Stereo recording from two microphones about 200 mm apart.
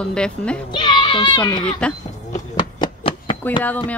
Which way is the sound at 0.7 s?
20° left (ahead or behind).